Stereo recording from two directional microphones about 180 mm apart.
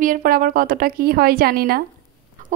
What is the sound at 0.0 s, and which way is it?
Speech, 50° right (ahead or behind).